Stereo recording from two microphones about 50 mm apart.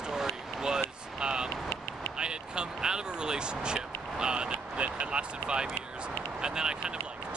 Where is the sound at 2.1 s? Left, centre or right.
Centre.